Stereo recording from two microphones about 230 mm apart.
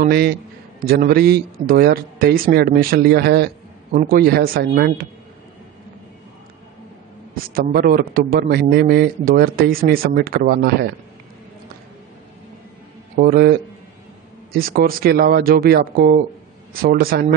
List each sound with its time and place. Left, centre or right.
0.0 s a man's voice: right
7.5 s a man's voice: right
13.1 s a man's voice: right